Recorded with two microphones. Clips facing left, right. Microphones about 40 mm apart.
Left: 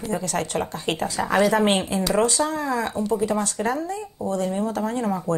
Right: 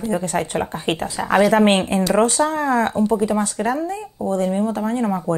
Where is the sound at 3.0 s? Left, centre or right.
Right.